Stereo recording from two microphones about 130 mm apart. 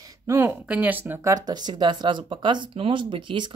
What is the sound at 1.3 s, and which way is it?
Speech, 30° right (ahead or behind).